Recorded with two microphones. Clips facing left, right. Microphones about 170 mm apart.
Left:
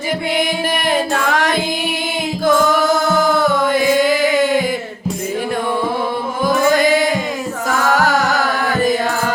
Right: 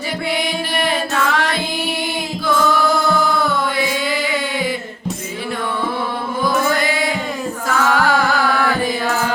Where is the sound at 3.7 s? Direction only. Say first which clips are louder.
Left 7 dB; 45° left (ahead or behind).